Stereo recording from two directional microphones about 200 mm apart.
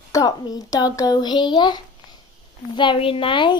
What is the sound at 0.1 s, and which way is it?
A child's voice, 20° left (ahead or behind).